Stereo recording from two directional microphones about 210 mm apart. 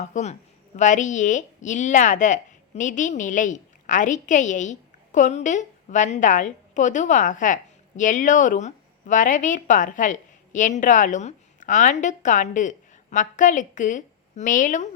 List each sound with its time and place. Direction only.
0.0 s a woman's voice: 35° left (ahead or behind)